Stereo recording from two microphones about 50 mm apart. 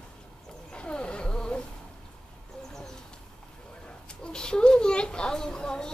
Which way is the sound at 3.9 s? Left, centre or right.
Centre.